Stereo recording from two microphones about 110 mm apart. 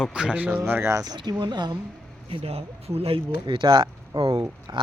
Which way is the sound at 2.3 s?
65° right (ahead or behind).